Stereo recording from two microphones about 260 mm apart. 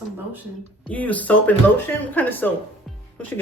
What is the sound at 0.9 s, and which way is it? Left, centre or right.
Speech, centre.